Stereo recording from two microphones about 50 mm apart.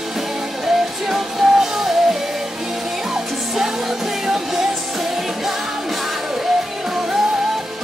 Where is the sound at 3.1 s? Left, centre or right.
Centre.